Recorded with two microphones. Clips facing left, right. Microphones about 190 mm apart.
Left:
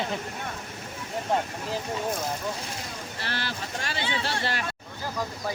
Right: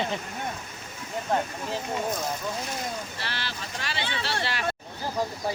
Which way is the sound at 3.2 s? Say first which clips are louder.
Left 2 dB; 50° left (ahead or behind).